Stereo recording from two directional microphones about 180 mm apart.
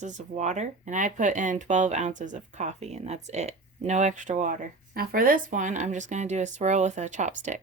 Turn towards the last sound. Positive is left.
turn(degrees=-40)  # may be behind; listen again after turning